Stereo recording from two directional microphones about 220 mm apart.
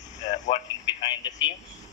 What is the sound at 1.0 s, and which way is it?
Speech, 20° left (ahead or behind).